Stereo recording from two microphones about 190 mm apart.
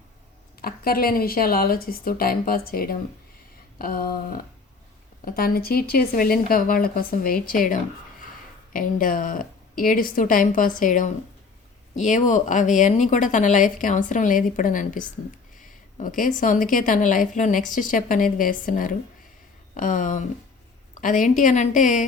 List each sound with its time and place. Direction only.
0.6 s a woman's voice: 50° left (ahead or behind)
15.5 s a sound: 45° left (ahead or behind)
16.4 s a woman's voice: 45° left (ahead or behind)